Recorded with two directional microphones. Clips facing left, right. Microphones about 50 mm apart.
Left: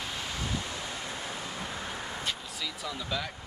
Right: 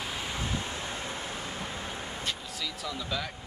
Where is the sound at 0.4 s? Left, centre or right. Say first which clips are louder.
Right 1 dB; right.